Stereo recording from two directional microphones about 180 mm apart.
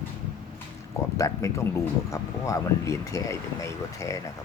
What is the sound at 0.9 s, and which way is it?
Speech, 15° left (ahead or behind).